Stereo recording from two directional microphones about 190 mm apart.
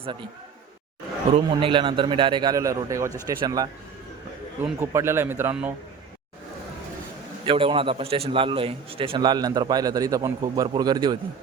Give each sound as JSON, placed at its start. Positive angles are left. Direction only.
{"t": 0.0, "sound": "a man's voice", "side_deg": -25}
{"t": 1.3, "sound": "a man's voice", "side_deg": -25}
{"t": 4.8, "sound": "a man's voice", "side_deg": -15}
{"t": 7.4, "sound": "a man's voice", "side_deg": -25}